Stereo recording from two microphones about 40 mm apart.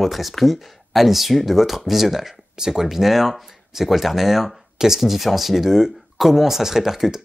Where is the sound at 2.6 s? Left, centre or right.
Centre.